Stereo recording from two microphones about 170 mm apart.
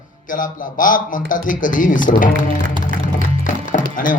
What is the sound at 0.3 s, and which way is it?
Speech, 50° left (ahead or behind).